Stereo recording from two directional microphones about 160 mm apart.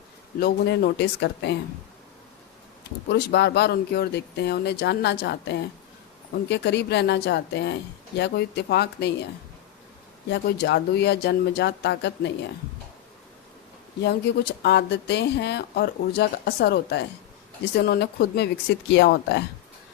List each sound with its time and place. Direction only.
0.3 s speech: 75° left (ahead or behind)
3.1 s speech: 90° left
10.2 s speech: 90° left
14.0 s speech: 90° left